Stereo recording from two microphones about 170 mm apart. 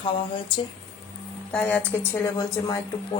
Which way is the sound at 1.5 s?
10° left (ahead or behind).